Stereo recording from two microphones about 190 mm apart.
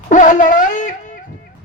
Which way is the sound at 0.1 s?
40° left (ahead or behind).